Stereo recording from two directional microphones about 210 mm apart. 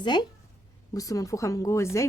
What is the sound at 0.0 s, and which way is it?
Speech, 20° left (ahead or behind).